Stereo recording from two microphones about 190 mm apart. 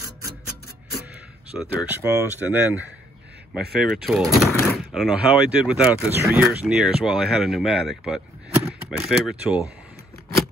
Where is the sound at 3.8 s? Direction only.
Centre (ahead or behind).